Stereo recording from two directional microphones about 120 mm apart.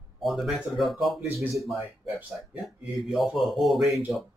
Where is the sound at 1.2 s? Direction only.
15° right (ahead or behind).